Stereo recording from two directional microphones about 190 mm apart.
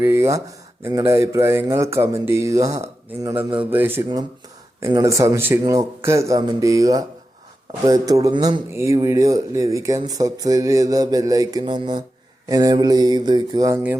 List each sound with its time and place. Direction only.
0.0 s a man's voice: 15° right (ahead or behind)